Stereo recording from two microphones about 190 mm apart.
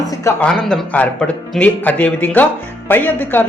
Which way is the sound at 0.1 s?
15° left (ahead or behind).